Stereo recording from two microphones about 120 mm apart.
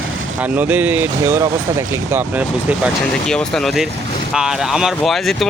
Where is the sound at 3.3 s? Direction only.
5° left (ahead or behind).